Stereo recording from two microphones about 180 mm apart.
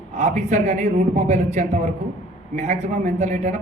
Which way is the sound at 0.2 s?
40° right (ahead or behind).